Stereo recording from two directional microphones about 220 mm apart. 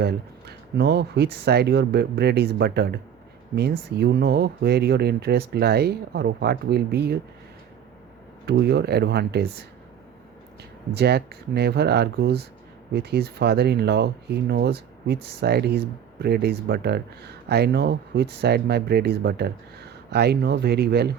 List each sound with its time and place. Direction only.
0.0 s speech: 50° right (ahead or behind)
8.4 s speech: 50° right (ahead or behind)
10.9 s speech: 50° right (ahead or behind)